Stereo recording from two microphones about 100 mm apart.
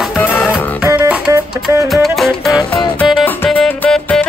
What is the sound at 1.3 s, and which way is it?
Music, 30° right (ahead or behind).